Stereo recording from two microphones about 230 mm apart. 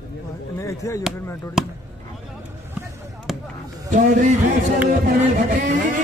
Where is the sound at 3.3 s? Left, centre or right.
Centre.